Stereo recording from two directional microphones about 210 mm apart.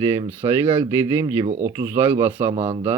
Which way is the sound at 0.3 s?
10° right (ahead or behind).